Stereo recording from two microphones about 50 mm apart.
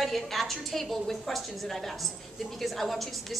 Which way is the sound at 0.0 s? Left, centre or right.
Centre.